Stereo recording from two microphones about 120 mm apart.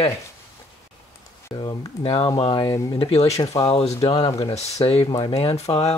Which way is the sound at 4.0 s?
50° left (ahead or behind).